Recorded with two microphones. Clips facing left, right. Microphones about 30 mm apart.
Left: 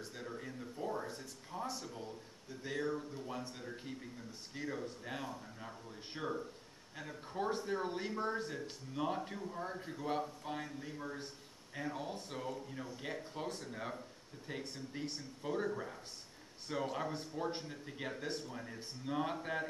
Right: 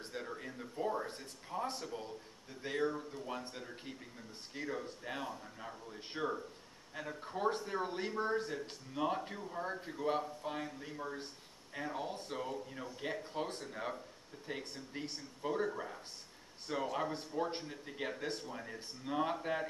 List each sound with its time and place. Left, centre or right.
0.0 s a sound: right
1.0 s speech: right
1.5 s speech: right
2.9 s speech: centre
4.6 s speech: centre